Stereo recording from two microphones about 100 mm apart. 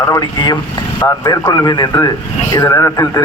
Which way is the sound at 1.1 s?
35° left (ahead or behind).